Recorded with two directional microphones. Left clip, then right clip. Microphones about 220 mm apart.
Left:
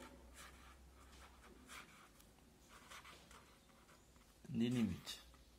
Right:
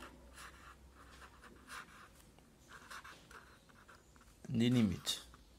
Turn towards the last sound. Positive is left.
turn(degrees=-50)  # may be behind; listen again after turning